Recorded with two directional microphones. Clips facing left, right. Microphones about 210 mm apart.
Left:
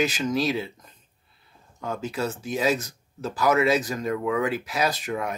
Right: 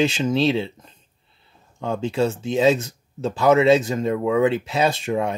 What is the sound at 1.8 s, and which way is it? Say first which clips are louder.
Speech: right 7 dB; 25° right (ahead or behind).